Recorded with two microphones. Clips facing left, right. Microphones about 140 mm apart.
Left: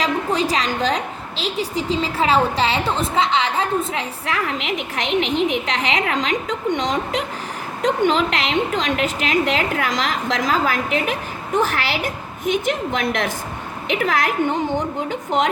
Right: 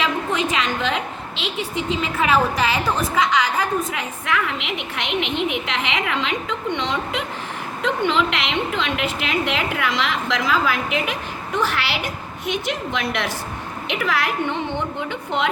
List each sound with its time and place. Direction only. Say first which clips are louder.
0.0 s a woman's voice: left 2 dB; 35° left (ahead or behind)